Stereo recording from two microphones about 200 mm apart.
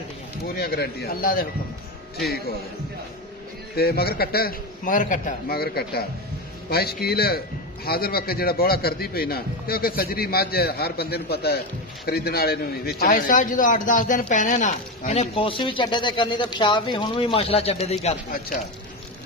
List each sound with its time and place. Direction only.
0.6 s a man's voice: 50° left (ahead or behind)
3.7 s a man's voice: 50° left (ahead or behind); by 18.1 s 30° left (ahead or behind)